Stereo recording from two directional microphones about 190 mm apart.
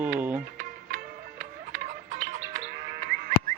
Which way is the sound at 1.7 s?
40° right (ahead or behind).